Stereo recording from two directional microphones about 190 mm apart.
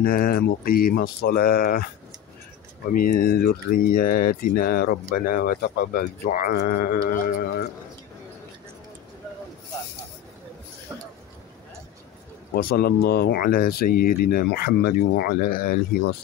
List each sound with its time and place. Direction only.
0.0 s speech: 50° left (ahead or behind)
2.9 s speech: 50° left (ahead or behind)
12.5 s speech: 50° left (ahead or behind)